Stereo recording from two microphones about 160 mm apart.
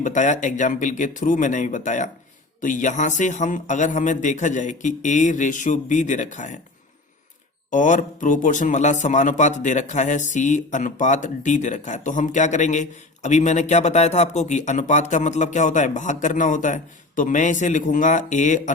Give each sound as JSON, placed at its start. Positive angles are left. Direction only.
{"t": 0.0, "sound": "speech", "side_deg": 50}
{"t": 7.7, "sound": "speech", "side_deg": 55}